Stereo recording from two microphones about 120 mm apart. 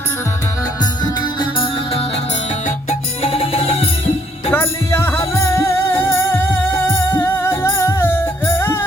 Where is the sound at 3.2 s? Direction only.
55° left (ahead or behind).